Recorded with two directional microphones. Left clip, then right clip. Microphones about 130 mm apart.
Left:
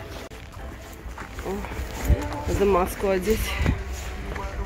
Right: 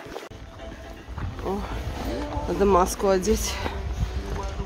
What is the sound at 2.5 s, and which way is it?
Speech, 25° right (ahead or behind).